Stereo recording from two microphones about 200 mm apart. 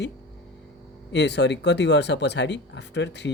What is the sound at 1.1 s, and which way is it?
A man's voice, 60° left (ahead or behind).